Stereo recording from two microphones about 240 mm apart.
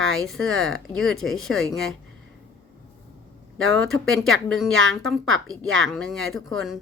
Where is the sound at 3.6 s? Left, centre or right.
Right.